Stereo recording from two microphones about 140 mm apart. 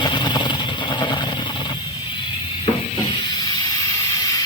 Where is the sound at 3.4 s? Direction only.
25° left (ahead or behind).